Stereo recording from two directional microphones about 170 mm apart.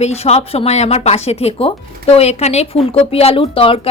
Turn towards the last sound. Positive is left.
turn(degrees=35)  # may be behind; listen again after turning